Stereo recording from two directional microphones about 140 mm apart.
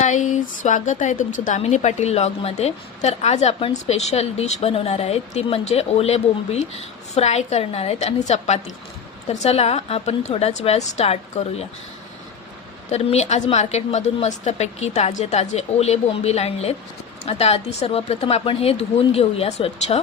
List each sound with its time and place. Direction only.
0.0 s speech: 60° left (ahead or behind)
12.9 s speech: 50° left (ahead or behind)